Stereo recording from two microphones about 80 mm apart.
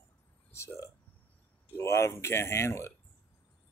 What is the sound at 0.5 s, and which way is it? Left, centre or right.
Speech, left.